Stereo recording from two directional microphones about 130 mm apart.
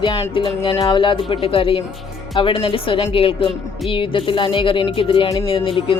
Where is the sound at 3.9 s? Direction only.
40° left (ahead or behind).